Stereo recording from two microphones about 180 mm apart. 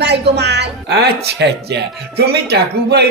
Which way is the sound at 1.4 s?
70° right (ahead or behind).